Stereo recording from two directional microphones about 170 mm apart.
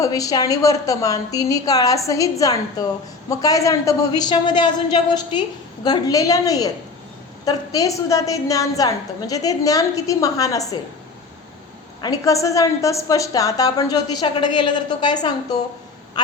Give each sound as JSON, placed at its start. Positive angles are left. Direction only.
{"t": 0.0, "sound": "a woman's voice", "side_deg": 20}
{"t": 12.0, "sound": "a woman's voice", "side_deg": 20}
{"t": 16.1, "sound": "a sound", "side_deg": 25}